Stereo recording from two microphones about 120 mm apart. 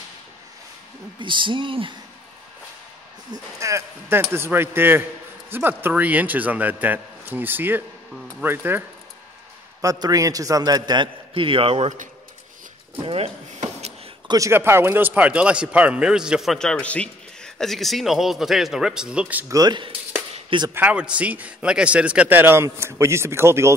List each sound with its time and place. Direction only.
1.2 s speech: 45° right (ahead or behind)
3.5 s a man's voice: 25° right (ahead or behind)
9.8 s a man's voice: 30° right (ahead or behind); by 12.1 s 75° right (ahead or behind)
13.0 s speech: 55° right (ahead or behind)
13.6 s a sound: 65° right (ahead or behind)
14.2 s speech: 30° right (ahead or behind)
14.5 s a man's voice: 20° right (ahead or behind)
19.5 s a man's voice: 35° right (ahead or behind)
20.7 s a man's voice: 10° right (ahead or behind)